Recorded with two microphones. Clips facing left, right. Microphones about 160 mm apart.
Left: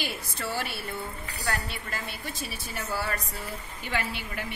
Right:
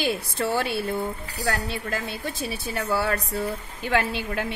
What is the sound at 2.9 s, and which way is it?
Speech, 65° right (ahead or behind).